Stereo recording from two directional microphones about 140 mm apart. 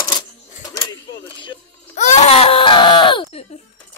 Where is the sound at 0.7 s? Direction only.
30° left (ahead or behind).